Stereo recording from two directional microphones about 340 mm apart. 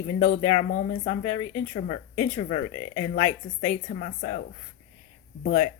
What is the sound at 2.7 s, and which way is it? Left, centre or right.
Speech, left.